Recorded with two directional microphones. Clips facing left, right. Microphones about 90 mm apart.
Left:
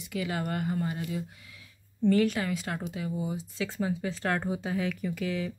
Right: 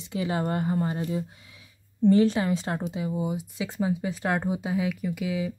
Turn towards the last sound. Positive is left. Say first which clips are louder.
# right 3 dB
turn(degrees=-10)  # may be behind; listen again after turning